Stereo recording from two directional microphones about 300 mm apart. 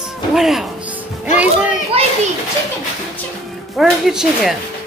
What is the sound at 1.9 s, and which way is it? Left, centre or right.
Speech, centre.